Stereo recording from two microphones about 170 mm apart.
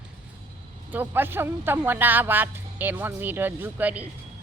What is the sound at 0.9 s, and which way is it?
A man's voice, 10° right (ahead or behind).